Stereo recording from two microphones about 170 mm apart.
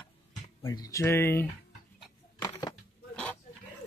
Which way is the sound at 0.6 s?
20° left (ahead or behind).